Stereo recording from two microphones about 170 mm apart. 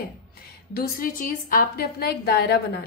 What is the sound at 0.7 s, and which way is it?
A woman's voice, 55° left (ahead or behind).